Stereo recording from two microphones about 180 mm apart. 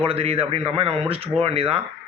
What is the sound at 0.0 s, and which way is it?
Speech, 35° right (ahead or behind).